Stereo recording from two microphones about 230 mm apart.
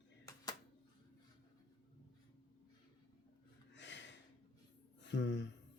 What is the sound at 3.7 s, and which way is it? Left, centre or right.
Gasp, left.